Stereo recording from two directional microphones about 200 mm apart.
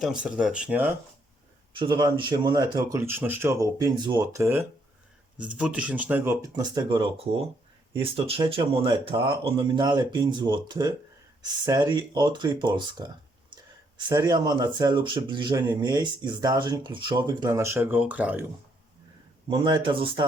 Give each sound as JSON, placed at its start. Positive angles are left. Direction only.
{"t": 0.0, "sound": "speech", "side_deg": -5}
{"t": 1.7, "sound": "speech", "side_deg": -25}
{"t": 14.1, "sound": "speech", "side_deg": -20}
{"t": 19.5, "sound": "speech", "side_deg": -25}